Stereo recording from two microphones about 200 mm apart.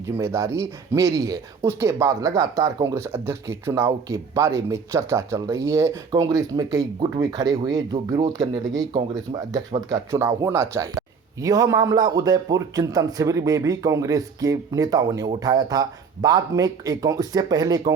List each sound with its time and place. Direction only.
0.0 s speech: 15° right (ahead or behind)